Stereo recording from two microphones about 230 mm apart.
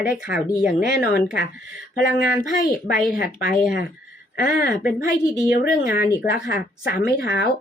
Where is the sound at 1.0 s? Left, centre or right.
Left.